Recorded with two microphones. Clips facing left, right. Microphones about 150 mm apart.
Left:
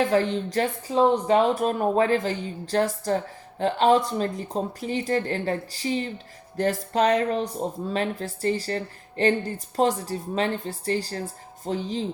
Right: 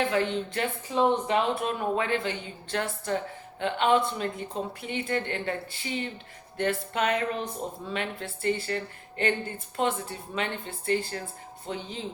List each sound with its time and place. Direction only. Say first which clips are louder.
0.0 s speech: left 4 dB; 35° left (ahead or behind)